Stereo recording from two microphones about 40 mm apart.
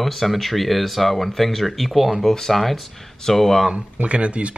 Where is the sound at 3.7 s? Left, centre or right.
Right.